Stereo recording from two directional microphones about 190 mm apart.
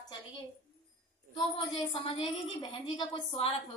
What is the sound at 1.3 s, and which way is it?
A woman's voice, 25° left (ahead or behind).